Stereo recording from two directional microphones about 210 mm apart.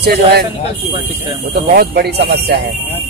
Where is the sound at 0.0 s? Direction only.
50° right (ahead or behind).